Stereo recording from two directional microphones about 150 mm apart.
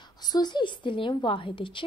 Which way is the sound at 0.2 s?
25° left (ahead or behind).